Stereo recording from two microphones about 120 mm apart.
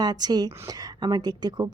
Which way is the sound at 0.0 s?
35° right (ahead or behind).